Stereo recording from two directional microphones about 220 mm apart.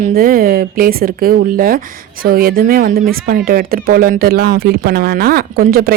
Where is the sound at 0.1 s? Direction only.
40° right (ahead or behind).